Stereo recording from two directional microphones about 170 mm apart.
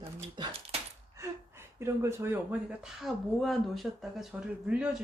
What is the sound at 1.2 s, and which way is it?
Gasp, 15° right (ahead or behind).